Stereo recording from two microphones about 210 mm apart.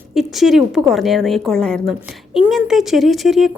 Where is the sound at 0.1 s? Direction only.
Centre (ahead or behind).